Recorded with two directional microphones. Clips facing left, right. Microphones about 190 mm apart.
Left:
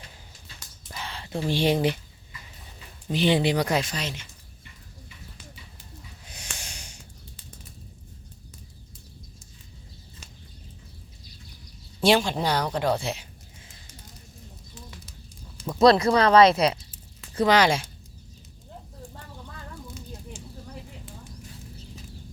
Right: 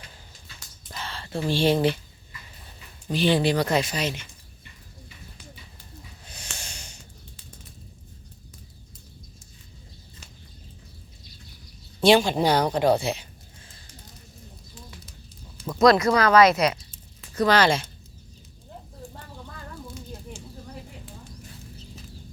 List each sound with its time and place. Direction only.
0.9 s speech: 15° left (ahead or behind)
3.1 s speech: 20° left (ahead or behind)
3.8 s speech: 10° right (ahead or behind)
6.3 s snort: 15° left (ahead or behind)
11.9 s speech: centre (ahead or behind); by 13.0 s 15° right (ahead or behind)
13.0 s speech: centre (ahead or behind)
15.8 s speech: 30° left (ahead or behind); by 17.8 s 15° left (ahead or behind)